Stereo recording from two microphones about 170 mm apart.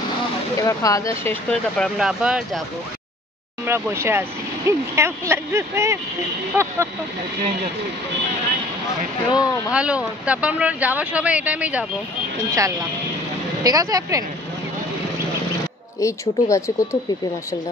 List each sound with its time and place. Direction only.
0.6 s speech: 20° left (ahead or behind); by 2.6 s 5° right (ahead or behind)
3.6 s speech: 15° right (ahead or behind)
9.3 s speech: 20° left (ahead or behind)
9.7 s speech: 5° right (ahead or behind)
12.4 s speech: 20° right (ahead or behind)
16.0 s speech: 20° left (ahead or behind)